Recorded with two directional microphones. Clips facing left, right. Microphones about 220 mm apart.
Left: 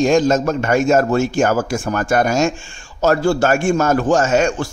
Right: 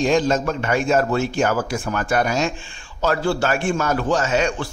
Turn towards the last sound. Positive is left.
turn(degrees=45)  # may be behind; listen again after turning